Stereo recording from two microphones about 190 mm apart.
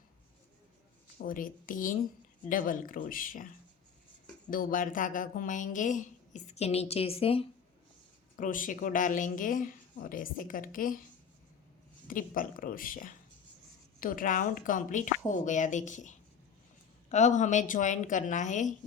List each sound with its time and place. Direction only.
1.2 s a woman's voice: 45° left (ahead or behind)
4.5 s speech: 45° left (ahead or behind); by 7.4 s 30° left (ahead or behind)
8.4 s a woman's voice: 45° left (ahead or behind)
12.0 s a woman's voice: 45° left (ahead or behind)